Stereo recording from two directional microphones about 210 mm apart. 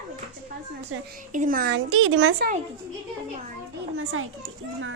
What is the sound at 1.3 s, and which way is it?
Speech, 40° right (ahead or behind).